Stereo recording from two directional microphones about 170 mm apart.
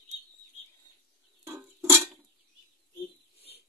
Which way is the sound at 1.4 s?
15° right (ahead or behind).